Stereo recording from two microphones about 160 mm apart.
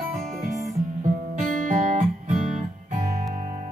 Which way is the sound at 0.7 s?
50° right (ahead or behind).